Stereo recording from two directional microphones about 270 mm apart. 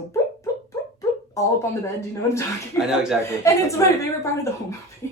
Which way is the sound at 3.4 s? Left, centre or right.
Centre.